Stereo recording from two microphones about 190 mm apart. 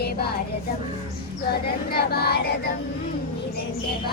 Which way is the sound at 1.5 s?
55° left (ahead or behind).